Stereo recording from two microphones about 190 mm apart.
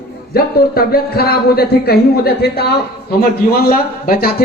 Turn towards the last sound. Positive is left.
turn(degrees=50)  # may be behind; listen again after turning